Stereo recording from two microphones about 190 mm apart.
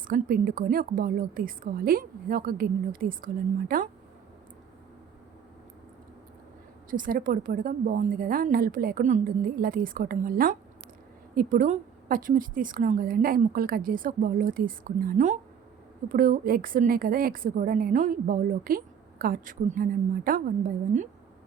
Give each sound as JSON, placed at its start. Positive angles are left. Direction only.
{"t": 0.1, "sound": "a woman's voice", "side_deg": -50}
{"t": 6.9, "sound": "a woman's voice", "side_deg": -45}